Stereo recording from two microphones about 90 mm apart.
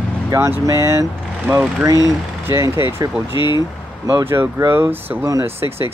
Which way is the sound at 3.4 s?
55° left (ahead or behind).